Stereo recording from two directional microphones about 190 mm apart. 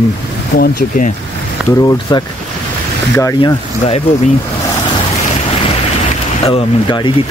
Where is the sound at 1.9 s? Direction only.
20° left (ahead or behind).